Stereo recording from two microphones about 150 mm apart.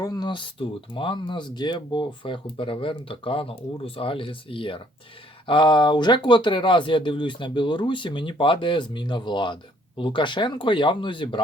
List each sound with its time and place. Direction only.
0.0 s speech: 25° left (ahead or behind)